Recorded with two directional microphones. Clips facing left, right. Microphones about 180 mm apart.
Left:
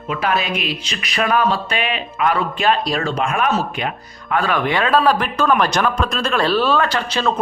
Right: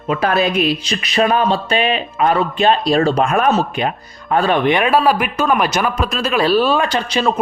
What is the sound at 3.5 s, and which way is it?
A man's voice, 25° right (ahead or behind).